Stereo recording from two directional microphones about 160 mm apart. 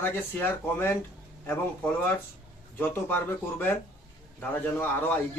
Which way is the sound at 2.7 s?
10° left (ahead or behind).